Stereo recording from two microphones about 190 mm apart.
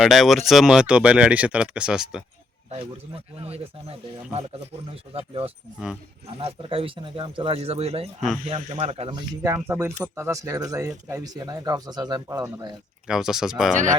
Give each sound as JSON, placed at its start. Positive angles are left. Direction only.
{"t": 0.0, "sound": "speech", "side_deg": 0}
{"t": 3.4, "sound": "speech", "side_deg": -30}
{"t": 9.6, "sound": "speech", "side_deg": -10}
{"t": 13.1, "sound": "speech", "side_deg": 0}